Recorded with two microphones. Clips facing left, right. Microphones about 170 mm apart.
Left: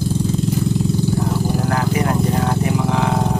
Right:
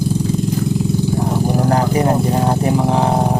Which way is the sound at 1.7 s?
35° right (ahead or behind).